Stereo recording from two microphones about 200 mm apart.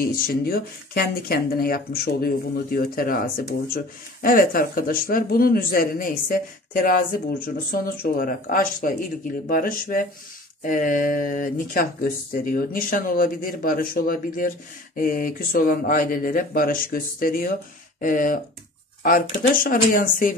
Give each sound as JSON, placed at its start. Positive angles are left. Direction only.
{"t": 0.0, "sound": "speech", "side_deg": 50}